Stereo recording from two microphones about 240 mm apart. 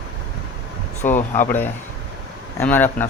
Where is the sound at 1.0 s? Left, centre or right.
Left.